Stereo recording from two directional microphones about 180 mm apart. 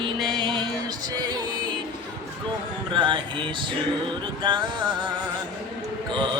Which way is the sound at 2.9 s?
25° right (ahead or behind).